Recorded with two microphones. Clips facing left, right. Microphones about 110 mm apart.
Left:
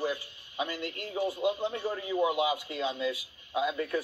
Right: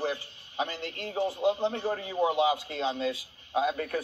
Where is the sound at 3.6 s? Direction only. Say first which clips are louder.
Right 1 dB; 45° right (ahead or behind).